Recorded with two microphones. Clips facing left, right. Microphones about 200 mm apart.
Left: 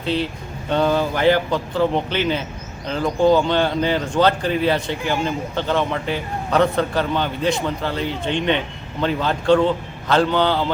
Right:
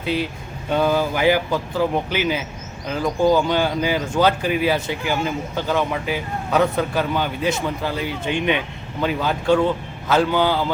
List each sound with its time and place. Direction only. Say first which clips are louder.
0.0 s speech: left 1 dB; 10° right (ahead or behind)